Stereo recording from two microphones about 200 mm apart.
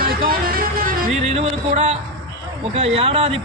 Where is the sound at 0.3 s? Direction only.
45° right (ahead or behind).